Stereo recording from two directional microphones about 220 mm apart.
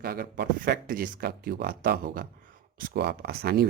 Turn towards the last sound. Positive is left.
turn(degrees=-45)  # may be behind; listen again after turning